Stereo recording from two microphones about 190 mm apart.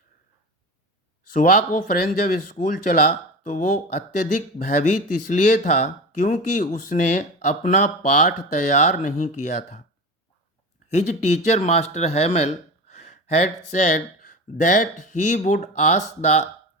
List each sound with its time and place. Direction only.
1.3 s speech: 40° left (ahead or behind)
10.9 s speech: 35° left (ahead or behind)